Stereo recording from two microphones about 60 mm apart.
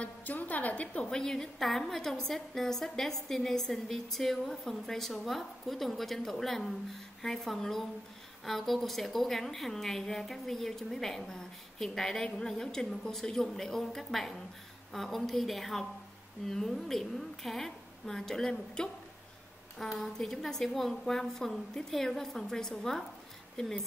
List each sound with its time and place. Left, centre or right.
0.0 s a woman's voice: left
1.1 s a woman's voice: centre